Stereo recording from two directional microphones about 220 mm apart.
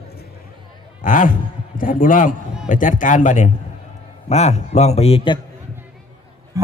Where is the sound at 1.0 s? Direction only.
35° left (ahead or behind).